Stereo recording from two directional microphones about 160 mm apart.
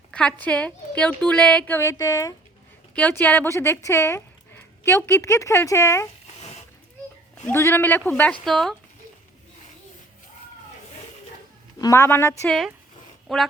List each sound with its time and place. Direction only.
0.1 s a woman's voice: 10° left (ahead or behind)
2.9 s speech: 10° left (ahead or behind)
7.4 s a woman's voice: 15° left (ahead or behind)
11.8 s a woman's voice: 20° left (ahead or behind)
13.2 s speech: centre (ahead or behind)